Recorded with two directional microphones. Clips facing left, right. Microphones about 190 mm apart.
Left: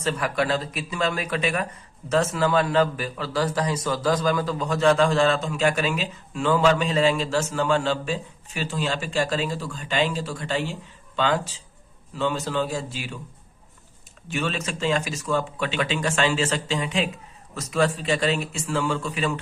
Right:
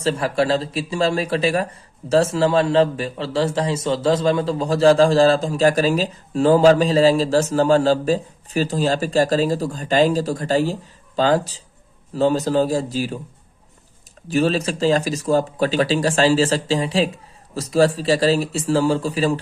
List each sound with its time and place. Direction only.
0.0 s a man's voice: 30° right (ahead or behind)
14.3 s a man's voice: 35° right (ahead or behind)